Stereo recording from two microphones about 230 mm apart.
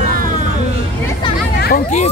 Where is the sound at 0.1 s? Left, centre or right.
Right.